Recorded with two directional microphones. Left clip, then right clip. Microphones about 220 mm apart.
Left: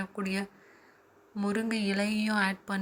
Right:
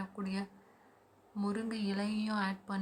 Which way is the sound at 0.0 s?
10° left (ahead or behind).